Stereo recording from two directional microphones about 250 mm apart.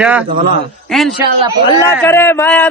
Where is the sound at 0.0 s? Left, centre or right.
Centre.